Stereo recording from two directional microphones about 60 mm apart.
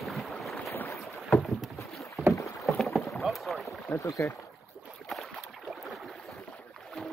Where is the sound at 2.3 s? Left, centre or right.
Left.